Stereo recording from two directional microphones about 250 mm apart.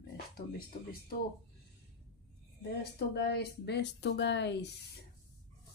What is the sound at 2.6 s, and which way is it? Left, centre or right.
Speech, left.